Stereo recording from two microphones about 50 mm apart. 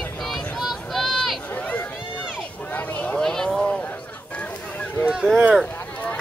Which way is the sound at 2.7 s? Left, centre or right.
Left.